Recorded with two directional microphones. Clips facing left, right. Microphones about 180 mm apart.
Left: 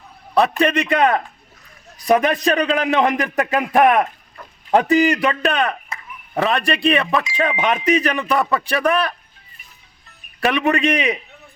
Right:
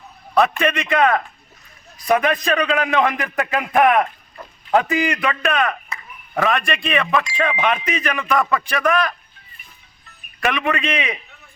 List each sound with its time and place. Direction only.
0.3 s speech: 35° left (ahead or behind)
10.4 s speech: 40° left (ahead or behind)